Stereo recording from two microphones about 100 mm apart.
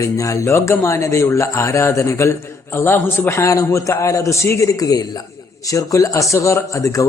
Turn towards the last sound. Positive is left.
turn(degrees=35)  # may be behind; listen again after turning